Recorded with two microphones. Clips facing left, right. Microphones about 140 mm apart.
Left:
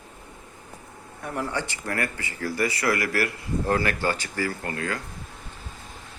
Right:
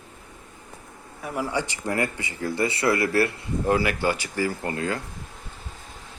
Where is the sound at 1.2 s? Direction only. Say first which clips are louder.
Right 2 dB; 5° right (ahead or behind); by 3.4 s 25° right (ahead or behind).